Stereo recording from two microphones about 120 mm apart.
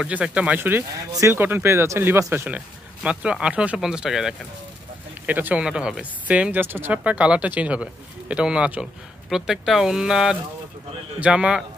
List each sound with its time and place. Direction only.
0.0 s speech: 10° right (ahead or behind)